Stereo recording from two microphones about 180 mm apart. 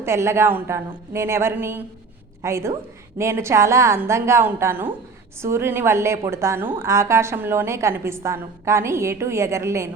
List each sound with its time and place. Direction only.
0.0 s a woman's voice: 15° right (ahead or behind)